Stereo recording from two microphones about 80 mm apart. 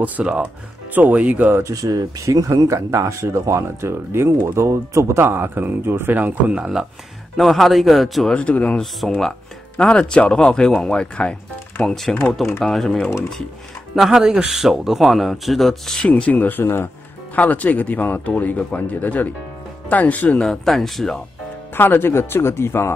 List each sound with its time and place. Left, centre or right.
0.0 s speech: centre
1.6 s speech: right
6.6 s speech: centre
8.3 s speech: centre
16.1 s speech: centre
20.4 s speech: centre
21.7 s speech: left